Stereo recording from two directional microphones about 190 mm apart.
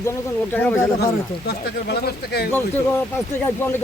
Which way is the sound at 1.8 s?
55° left (ahead or behind).